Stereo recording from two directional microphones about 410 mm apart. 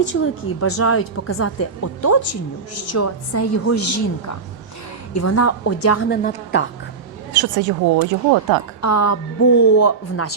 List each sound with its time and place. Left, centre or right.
0.1 s a woman's voice: left
2.3 s a woman's voice: left
2.9 s a woman's voice: left
5.1 s a woman's voice: left
7.4 s speech: right
8.8 s a woman's voice: left